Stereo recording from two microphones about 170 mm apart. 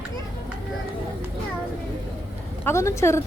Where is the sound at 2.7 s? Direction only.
15° left (ahead or behind).